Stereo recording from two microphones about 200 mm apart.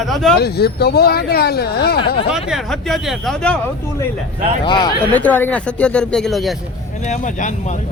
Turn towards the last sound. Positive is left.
turn(degrees=40)  # may be behind; listen again after turning